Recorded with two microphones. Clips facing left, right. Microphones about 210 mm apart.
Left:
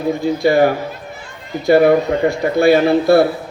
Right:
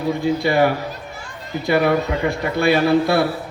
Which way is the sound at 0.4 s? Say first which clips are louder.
Left 6 dB; 45° left (ahead or behind).